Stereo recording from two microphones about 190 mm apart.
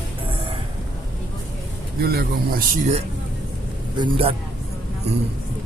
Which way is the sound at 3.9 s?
25° right (ahead or behind).